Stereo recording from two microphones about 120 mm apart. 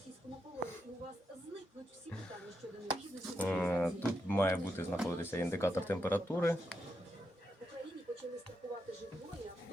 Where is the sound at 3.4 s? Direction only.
10° left (ahead or behind).